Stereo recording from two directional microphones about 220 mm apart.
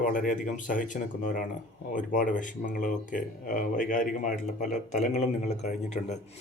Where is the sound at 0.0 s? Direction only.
40° left (ahead or behind).